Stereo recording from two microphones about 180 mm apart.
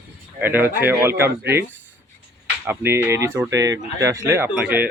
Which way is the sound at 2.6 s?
10° right (ahead or behind).